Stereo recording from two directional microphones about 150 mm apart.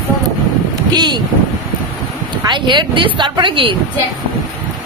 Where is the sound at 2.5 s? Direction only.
30° right (ahead or behind).